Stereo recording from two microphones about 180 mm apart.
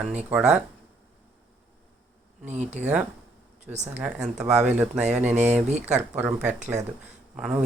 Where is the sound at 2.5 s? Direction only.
40° right (ahead or behind).